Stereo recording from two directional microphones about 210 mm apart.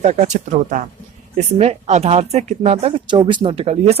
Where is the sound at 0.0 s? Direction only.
35° right (ahead or behind).